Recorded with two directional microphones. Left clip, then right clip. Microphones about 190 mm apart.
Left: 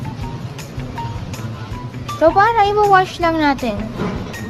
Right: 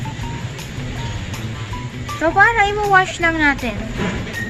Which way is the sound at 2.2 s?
55° left (ahead or behind).